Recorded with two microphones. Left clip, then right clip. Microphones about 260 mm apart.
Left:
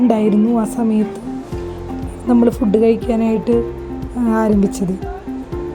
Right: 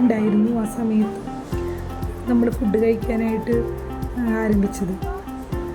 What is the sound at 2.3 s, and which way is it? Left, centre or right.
A woman's voice, left.